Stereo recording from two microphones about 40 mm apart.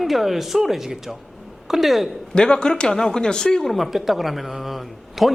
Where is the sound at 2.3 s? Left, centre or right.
Left.